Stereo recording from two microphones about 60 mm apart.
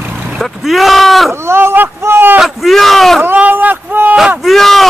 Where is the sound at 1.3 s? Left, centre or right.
Right.